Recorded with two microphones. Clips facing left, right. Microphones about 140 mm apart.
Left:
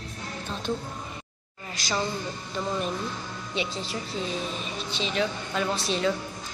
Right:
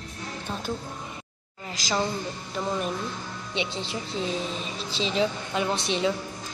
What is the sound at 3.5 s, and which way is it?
A woman's voice, 25° right (ahead or behind).